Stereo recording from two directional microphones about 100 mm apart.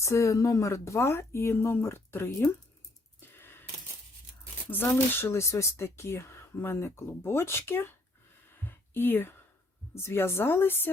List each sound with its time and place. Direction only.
0.0 s speech: 30° left (ahead or behind)
3.2 s wheeze: 20° left (ahead or behind)
4.9 s speech: 30° left (ahead or behind)
8.6 s a sound: 20° left (ahead or behind)
9.9 s speech: 25° left (ahead or behind)